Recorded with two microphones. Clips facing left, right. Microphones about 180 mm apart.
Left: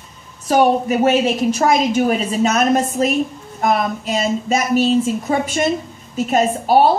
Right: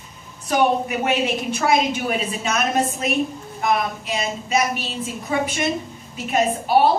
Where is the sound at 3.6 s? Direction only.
45° left (ahead or behind).